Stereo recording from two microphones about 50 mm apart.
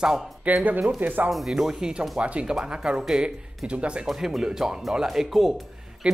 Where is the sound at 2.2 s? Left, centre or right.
Right.